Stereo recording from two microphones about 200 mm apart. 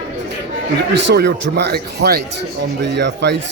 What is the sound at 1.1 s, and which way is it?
A man's voice, 55° right (ahead or behind).